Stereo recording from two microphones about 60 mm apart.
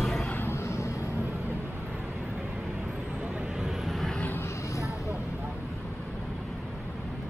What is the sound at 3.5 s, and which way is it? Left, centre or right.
Vehicle, centre.